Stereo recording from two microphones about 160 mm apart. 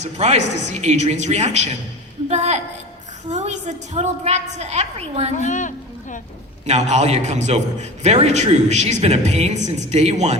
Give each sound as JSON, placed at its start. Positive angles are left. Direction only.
{"t": 0.0, "sound": "a man's voice", "side_deg": -45}
{"t": 5.4, "sound": "speech", "side_deg": 50}
{"t": 6.7, "sound": "a man's voice", "side_deg": -45}